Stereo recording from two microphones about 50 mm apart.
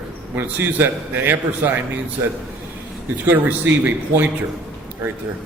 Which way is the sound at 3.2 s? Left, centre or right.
Right.